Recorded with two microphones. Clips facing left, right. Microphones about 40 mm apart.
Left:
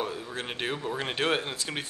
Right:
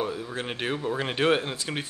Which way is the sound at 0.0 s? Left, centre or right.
Centre.